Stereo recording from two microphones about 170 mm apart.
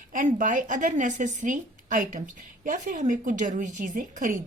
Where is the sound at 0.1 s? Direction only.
50° right (ahead or behind).